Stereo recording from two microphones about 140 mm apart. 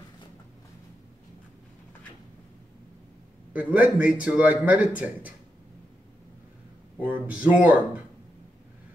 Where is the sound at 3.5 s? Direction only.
10° right (ahead or behind).